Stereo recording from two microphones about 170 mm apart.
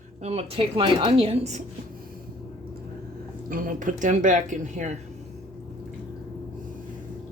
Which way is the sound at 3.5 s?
50° right (ahead or behind).